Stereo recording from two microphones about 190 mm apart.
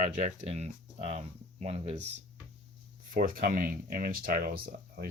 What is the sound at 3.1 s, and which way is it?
Speech, 45° right (ahead or behind).